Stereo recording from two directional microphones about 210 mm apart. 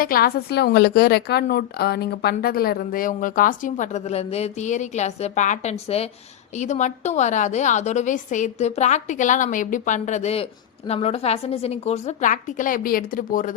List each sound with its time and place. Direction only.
0.0 s a woman's voice: 45° left (ahead or behind)